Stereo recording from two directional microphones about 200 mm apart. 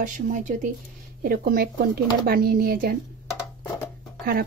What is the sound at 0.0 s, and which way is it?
Speech, 40° right (ahead or behind).